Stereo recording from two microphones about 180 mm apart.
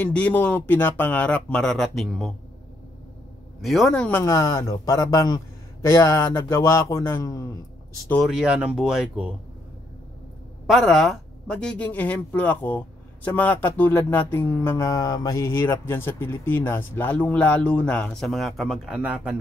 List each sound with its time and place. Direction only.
0.0 s a man's voice: 10° left (ahead or behind)
3.6 s speech: centre (ahead or behind)
4.2 s a man's voice: 15° left (ahead or behind)
8.2 s speech: 5° right (ahead or behind)
10.7 s a man's voice: centre (ahead or behind)